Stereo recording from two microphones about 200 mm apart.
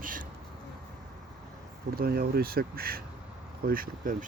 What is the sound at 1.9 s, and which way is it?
Speech, 50° right (ahead or behind).